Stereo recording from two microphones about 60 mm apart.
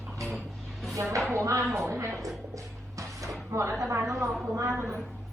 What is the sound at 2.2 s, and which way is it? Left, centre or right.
Music, right.